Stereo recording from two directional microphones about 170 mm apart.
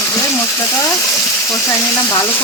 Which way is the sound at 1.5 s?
15° left (ahead or behind).